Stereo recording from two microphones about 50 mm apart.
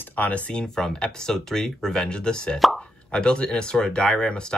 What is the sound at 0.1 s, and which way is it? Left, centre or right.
Speech, left.